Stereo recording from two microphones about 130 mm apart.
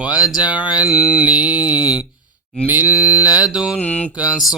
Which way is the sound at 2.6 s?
15° right (ahead or behind).